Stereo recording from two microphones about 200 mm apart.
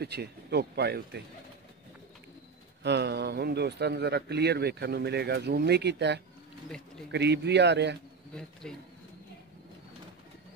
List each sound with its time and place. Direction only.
0.0 s speech: 55° right (ahead or behind)
2.8 s speech: 55° right (ahead or behind)
8.6 s speech: 5° left (ahead or behind)